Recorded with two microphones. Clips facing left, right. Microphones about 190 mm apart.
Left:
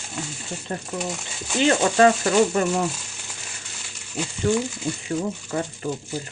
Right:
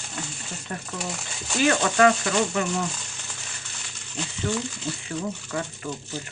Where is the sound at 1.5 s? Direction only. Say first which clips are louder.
Left 3 dB; 25° left (ahead or behind).